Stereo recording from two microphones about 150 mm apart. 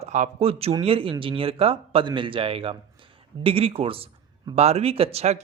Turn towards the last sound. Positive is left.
turn(degrees=-45)  # may be behind; listen again after turning